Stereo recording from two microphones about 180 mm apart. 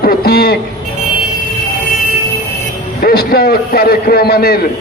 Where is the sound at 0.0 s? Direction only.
55° left (ahead or behind).